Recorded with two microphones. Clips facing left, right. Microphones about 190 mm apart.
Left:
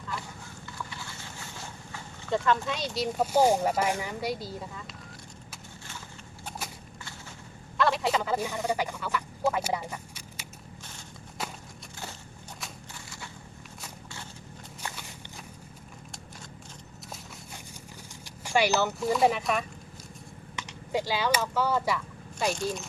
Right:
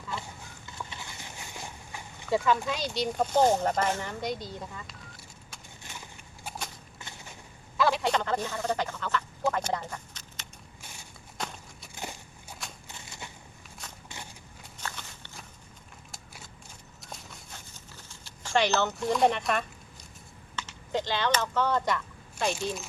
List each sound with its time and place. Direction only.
0.1 s clip-clop: 25° right (ahead or behind)
0.8 s speech: 20° right (ahead or behind); by 4.9 s centre (ahead or behind)
7.8 s a sound: centre (ahead or behind)
11.4 s walk: 5° left (ahead or behind)
12.9 s a sound: 20° right (ahead or behind)
14.8 s walk: 10° left (ahead or behind)
18.1 s speech: 15° left (ahead or behind)
20.6 s speech: 10° left (ahead or behind)